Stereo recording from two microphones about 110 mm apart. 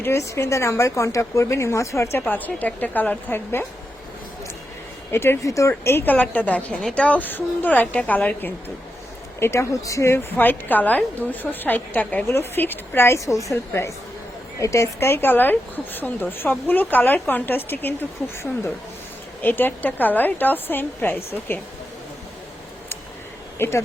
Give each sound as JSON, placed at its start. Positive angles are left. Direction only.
{"t": 0.0, "sound": "a woman's voice", "side_deg": 25}
{"t": 2.1, "sound": "a woman's voice", "side_deg": 15}
{"t": 5.1, "sound": "a woman's voice", "side_deg": 25}
{"t": 9.4, "sound": "a woman's voice", "side_deg": 25}
{"t": 10.3, "sound": "a woman's voice", "side_deg": 15}
{"t": 19.4, "sound": "a woman's voice", "side_deg": 15}
{"t": 23.6, "sound": "a woman's voice", "side_deg": 25}